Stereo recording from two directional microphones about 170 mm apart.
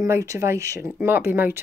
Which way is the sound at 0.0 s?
20° right (ahead or behind).